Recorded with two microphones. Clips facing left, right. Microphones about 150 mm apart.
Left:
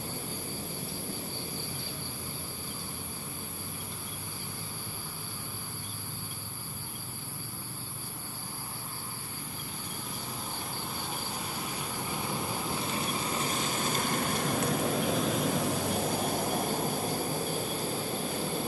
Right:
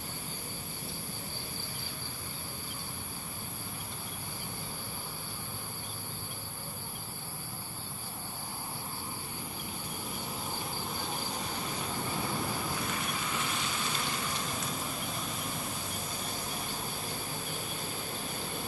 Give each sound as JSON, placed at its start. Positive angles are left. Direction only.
{"t": 12.8, "sound": "vehicle", "side_deg": 30}